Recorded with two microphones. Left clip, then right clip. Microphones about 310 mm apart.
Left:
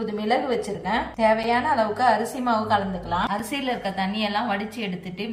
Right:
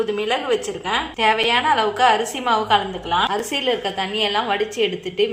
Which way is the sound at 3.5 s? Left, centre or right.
Centre.